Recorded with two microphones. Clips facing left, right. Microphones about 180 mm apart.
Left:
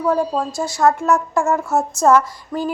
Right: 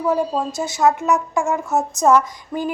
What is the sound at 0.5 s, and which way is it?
Speech, 20° right (ahead or behind).